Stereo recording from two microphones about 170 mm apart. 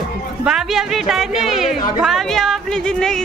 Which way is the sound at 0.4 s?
5° right (ahead or behind).